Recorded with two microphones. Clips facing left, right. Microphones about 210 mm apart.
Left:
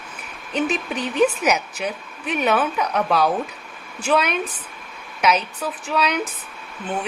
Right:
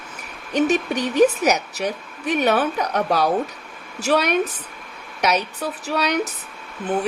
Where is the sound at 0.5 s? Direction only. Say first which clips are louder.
Right 4 dB; 35° right (ahead or behind).